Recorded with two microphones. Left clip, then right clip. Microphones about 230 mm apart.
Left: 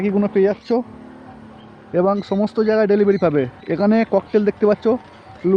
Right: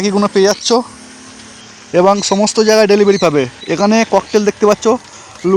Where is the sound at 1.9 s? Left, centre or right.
Centre.